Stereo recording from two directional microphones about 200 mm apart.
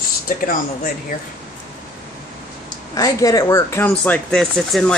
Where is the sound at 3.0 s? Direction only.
15° left (ahead or behind).